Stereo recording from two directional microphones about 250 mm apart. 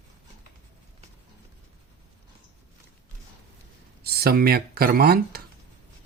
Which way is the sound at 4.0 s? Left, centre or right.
Right.